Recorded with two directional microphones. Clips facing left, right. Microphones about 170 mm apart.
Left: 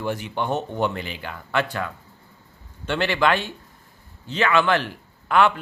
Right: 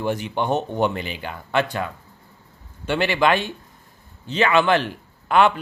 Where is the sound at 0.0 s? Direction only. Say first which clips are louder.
Right 3 dB; 20° right (ahead or behind).